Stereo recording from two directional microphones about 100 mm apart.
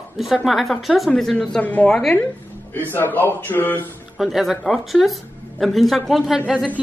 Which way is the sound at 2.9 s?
20° left (ahead or behind).